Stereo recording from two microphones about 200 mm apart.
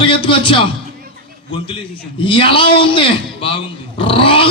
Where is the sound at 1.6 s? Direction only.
25° left (ahead or behind).